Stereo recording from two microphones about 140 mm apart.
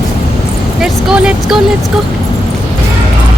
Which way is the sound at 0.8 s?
5° right (ahead or behind).